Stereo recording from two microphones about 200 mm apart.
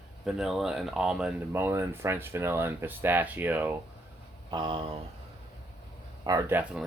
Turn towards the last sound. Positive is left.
turn(degrees=-10)  # may be behind; listen again after turning